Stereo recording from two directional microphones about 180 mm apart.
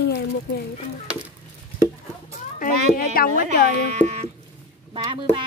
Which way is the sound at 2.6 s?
55° left (ahead or behind).